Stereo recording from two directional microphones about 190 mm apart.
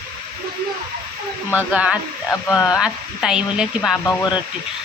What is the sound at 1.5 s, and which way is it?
Speech, 5° right (ahead or behind).